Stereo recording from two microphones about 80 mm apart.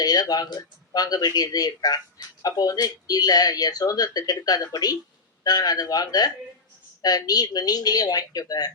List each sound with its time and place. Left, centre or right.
0.0 s speech: left